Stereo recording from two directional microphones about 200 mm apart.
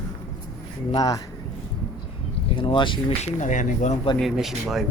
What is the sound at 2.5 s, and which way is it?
Speech, 25° left (ahead or behind).